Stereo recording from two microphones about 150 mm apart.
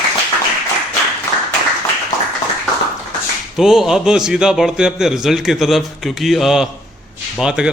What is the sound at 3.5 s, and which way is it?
A man's voice, 5° right (ahead or behind).